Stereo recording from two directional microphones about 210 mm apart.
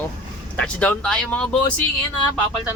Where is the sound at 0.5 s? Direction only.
5° left (ahead or behind).